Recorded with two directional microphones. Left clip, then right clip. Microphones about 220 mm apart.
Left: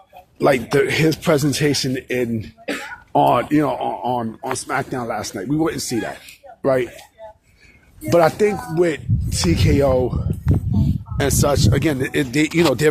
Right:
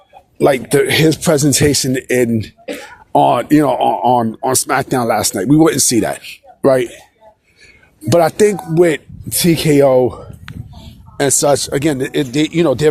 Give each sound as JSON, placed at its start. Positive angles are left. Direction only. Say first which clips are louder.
{"t": 0.3, "sound": "speech", "louder": "right 4 dB", "side_deg": -35}
{"t": 8.1, "sound": "speech", "louder": "right 4 dB", "side_deg": -40}